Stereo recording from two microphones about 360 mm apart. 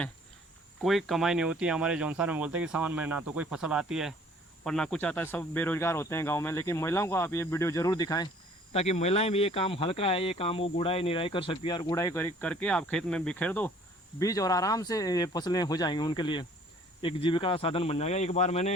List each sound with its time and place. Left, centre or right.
0.8 s speech: centre